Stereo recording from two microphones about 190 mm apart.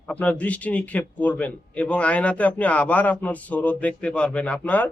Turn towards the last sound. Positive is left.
turn(degrees=5)  # may be behind; listen again after turning